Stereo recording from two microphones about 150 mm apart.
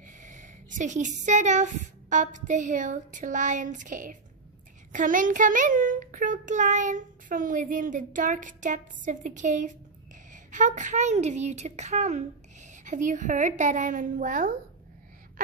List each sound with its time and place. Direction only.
0.0 s a woman's voice: 55° right (ahead or behind)